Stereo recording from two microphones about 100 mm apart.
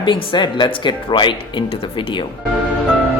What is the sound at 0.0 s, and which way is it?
Speech, 50° left (ahead or behind).